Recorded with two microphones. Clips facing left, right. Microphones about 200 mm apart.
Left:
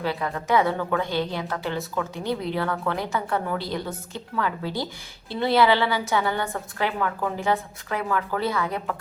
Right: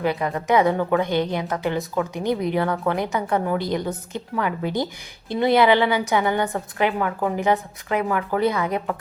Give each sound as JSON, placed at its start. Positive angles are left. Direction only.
{"t": 0.0, "sound": "a woman's voice", "side_deg": -20}